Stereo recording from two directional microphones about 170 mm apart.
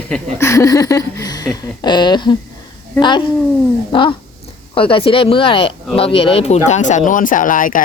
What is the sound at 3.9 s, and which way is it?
Speech, 30° left (ahead or behind).